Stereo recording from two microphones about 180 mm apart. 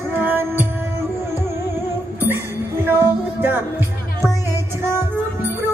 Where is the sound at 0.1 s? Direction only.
10° right (ahead or behind).